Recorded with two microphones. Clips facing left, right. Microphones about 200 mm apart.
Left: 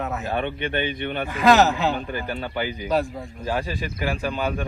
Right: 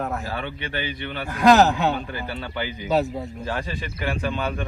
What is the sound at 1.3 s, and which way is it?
Speech, centre (ahead or behind).